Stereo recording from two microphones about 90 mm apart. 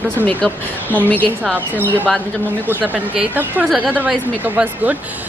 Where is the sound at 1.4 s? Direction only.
20° right (ahead or behind).